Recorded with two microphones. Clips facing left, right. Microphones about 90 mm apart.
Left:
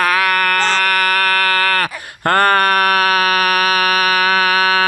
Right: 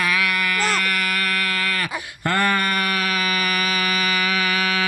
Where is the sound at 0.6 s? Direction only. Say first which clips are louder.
Left 6 dB; 80° left.